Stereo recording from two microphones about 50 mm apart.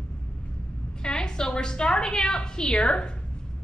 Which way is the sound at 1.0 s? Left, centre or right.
Centre.